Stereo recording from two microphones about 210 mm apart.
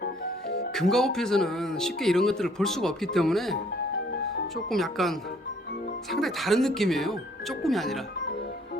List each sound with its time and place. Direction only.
0.0 s music: 50° left (ahead or behind)
0.7 s speech: centre (ahead or behind)